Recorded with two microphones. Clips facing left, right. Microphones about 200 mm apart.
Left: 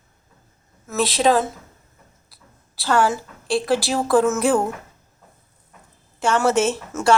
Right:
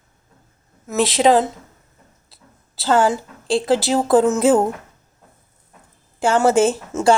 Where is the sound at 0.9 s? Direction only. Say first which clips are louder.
Right 3 dB; 25° right (ahead or behind).